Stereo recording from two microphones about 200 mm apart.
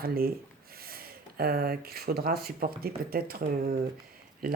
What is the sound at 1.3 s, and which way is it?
Speech, 50° right (ahead or behind).